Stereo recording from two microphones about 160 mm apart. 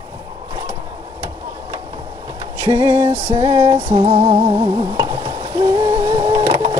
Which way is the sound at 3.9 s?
30° right (ahead or behind).